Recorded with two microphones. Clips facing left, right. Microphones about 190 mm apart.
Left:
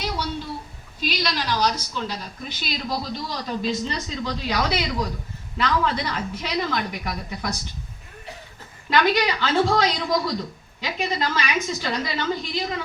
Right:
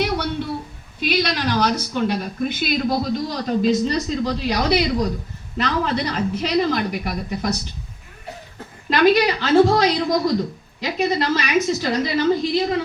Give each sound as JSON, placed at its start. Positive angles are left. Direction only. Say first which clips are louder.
{"t": 0.0, "sound": "a sound", "louder": "right 6 dB", "side_deg": -60}
{"t": 0.9, "sound": "a woman's voice", "louder": "right 5 dB", "side_deg": -60}
{"t": 8.9, "sound": "a woman's voice", "louder": "right 5 dB", "side_deg": -40}